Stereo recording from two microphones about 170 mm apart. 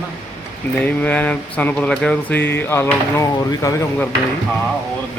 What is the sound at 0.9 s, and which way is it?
Speech, 10° left (ahead or behind).